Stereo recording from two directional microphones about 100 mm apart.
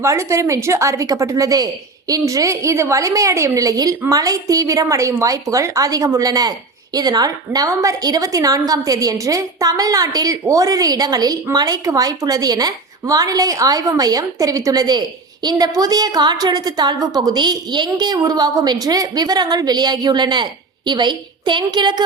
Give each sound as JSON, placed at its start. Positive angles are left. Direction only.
{"t": 0.0, "sound": "a woman's voice", "side_deg": -30}